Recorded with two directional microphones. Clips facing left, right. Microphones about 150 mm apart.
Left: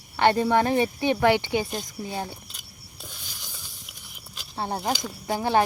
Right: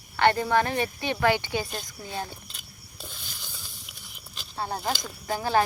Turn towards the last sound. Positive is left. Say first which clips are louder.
# left 2 dB
turn(degrees=20)  # may be behind; listen again after turning